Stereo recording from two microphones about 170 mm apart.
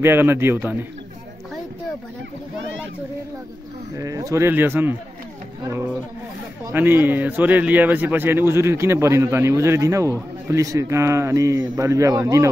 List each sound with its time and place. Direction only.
0.0 s speech: 15° right (ahead or behind)
3.9 s speech: 20° right (ahead or behind)
6.6 s speech: 10° right (ahead or behind)